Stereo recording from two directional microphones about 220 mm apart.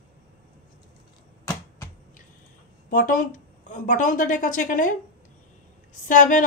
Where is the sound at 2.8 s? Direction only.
40° left (ahead or behind).